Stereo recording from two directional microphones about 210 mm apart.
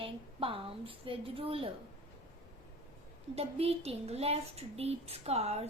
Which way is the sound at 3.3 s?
30° right (ahead or behind).